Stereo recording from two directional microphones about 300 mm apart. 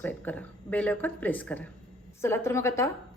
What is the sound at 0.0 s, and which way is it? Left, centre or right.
A woman's voice, centre.